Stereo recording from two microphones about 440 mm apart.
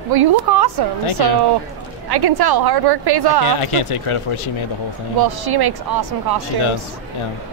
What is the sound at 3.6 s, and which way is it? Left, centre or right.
Speech, left.